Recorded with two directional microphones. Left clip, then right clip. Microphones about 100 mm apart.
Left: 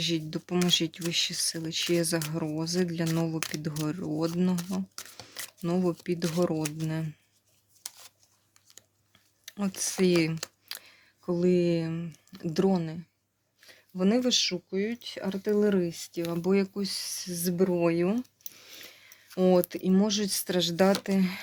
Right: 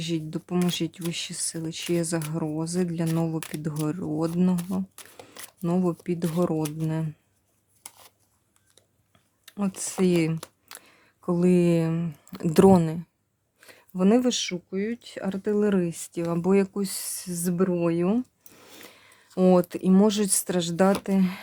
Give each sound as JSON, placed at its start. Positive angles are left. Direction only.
{"t": 0.0, "sound": "speech", "side_deg": -35}
{"t": 9.5, "sound": "speech", "side_deg": -45}
{"t": 10.7, "sound": "a sound", "side_deg": -45}
{"t": 11.3, "sound": "speech", "side_deg": -90}
{"t": 12.8, "sound": "speech", "side_deg": -65}
{"t": 13.6, "sound": "speech", "side_deg": -85}
{"t": 17.7, "sound": "speech", "side_deg": -35}
{"t": 18.5, "sound": "a sound", "side_deg": -65}
{"t": 19.5, "sound": "speech", "side_deg": -75}
{"t": 20.5, "sound": "speech", "side_deg": -50}